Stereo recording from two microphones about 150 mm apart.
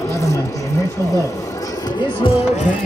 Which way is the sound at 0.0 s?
20° left (ahead or behind).